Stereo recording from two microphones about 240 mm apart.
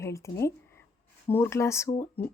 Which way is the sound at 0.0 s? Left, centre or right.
Centre.